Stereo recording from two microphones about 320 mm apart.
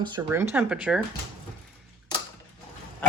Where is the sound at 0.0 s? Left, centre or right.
Centre.